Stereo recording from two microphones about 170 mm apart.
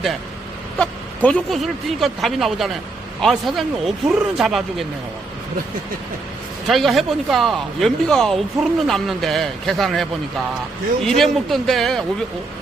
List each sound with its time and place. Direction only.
0.8 s speech: 5° left (ahead or behind)
6.7 s speech: centre (ahead or behind)